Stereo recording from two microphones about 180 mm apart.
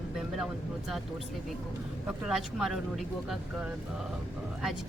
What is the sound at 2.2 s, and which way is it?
Speech, centre (ahead or behind).